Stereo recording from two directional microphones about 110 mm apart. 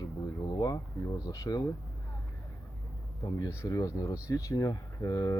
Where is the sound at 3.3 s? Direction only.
30° left (ahead or behind).